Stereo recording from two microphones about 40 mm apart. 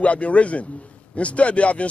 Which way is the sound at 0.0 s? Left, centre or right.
Left.